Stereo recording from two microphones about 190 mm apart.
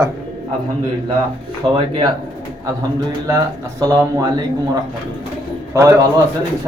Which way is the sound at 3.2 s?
15° right (ahead or behind).